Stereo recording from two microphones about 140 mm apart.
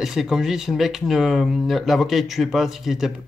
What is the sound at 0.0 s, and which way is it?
A man's voice, 5° right (ahead or behind).